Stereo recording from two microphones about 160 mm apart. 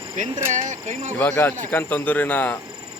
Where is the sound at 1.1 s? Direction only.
10° left (ahead or behind).